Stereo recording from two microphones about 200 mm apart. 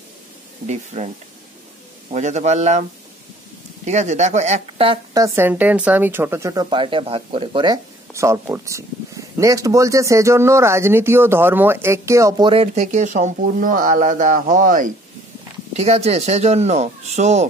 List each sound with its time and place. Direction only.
0.7 s speech: 35° right (ahead or behind)
3.8 s speech: 35° right (ahead or behind)
5.1 s speech: 15° right (ahead or behind); by 14.9 s 40° right (ahead or behind)
15.7 s speech: 30° right (ahead or behind)